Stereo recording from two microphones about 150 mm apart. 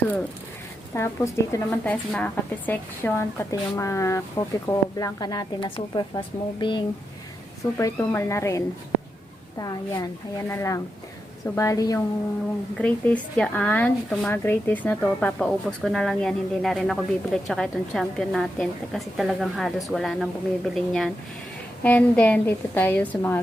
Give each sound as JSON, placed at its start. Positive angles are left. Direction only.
{"t": 0.9, "sound": "a woman's voice", "side_deg": 20}
{"t": 7.6, "sound": "a woman's voice", "side_deg": 20}
{"t": 12.7, "sound": "speech", "side_deg": 10}